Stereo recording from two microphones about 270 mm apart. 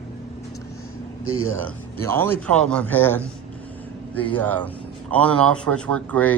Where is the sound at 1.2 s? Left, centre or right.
Left.